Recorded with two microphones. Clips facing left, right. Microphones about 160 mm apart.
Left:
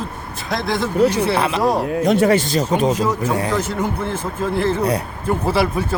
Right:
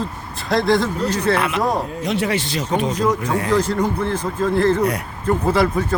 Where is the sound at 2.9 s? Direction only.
5° left (ahead or behind).